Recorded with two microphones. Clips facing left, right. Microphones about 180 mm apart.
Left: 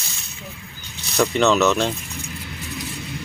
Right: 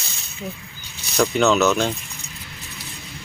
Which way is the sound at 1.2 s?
Centre (ahead or behind).